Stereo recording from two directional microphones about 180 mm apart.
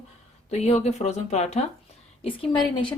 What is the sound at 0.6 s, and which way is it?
Speech, 35° left (ahead or behind).